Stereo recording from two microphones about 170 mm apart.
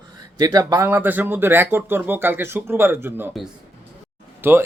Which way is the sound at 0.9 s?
10° right (ahead or behind).